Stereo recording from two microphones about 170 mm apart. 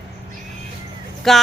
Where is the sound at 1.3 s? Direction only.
Centre (ahead or behind).